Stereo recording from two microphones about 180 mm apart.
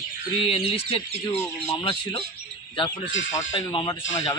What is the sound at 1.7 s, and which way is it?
Speech, 35° left (ahead or behind).